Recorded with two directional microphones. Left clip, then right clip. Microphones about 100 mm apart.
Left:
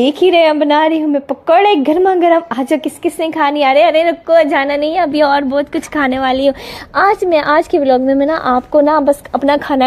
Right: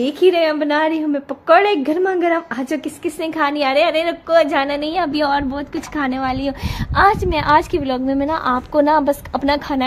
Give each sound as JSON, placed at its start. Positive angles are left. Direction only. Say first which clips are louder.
{"t": 0.0, "sound": "a woman's voice", "louder": "left 5 dB", "side_deg": 50}
{"t": 7.0, "sound": "a woman's voice", "louder": "left 4 dB", "side_deg": 40}
{"t": 8.8, "sound": "a woman's voice", "louder": "left 4 dB", "side_deg": 10}
{"t": 9.3, "sound": "a woman's voice", "louder": "left 5 dB", "side_deg": 25}